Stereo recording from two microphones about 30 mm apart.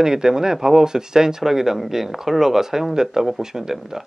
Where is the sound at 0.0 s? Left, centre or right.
Centre.